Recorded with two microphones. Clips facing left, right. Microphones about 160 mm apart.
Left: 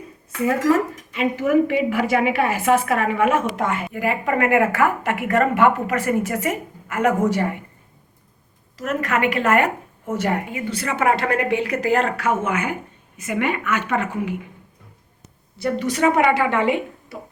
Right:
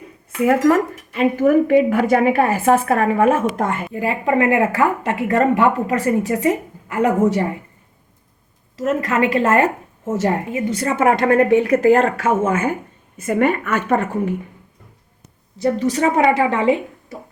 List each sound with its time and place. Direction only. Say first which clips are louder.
0.4 s a woman's voice: right 4 dB; 55° right (ahead or behind)
2.5 s a woman's voice: right 3 dB; 30° right (ahead or behind)
3.9 s speech: right 5 dB; 30° right (ahead or behind)
8.8 s speech: right 3 dB; 25° right (ahead or behind)
13.2 s a woman's voice: right 5 dB; 40° right (ahead or behind)
15.6 s a woman's voice: right 2 dB; 30° right (ahead or behind)